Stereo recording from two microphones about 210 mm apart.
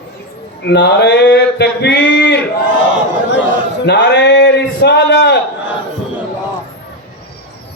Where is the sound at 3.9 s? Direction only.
55° left (ahead or behind).